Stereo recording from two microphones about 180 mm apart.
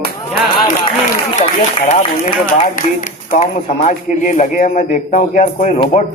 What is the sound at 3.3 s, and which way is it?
A man's voice, 45° left (ahead or behind).